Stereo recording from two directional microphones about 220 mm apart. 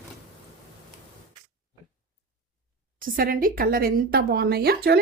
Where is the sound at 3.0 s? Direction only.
40° right (ahead or behind).